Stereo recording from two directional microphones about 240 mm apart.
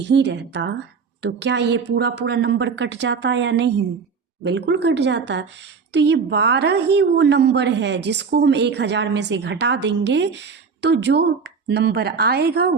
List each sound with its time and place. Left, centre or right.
0.0 s a woman's voice: right